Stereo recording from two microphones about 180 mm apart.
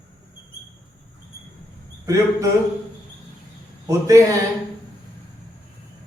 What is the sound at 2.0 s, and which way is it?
Speech, 15° right (ahead or behind).